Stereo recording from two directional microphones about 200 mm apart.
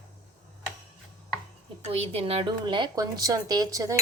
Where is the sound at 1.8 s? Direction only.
30° right (ahead or behind).